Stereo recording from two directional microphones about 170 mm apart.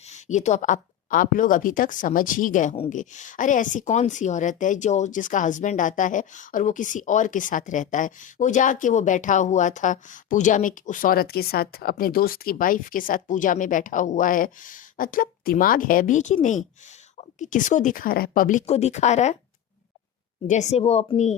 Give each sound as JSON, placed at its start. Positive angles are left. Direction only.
{"t": 0.1, "sound": "a woman's voice", "side_deg": 45}
{"t": 20.5, "sound": "speech", "side_deg": 45}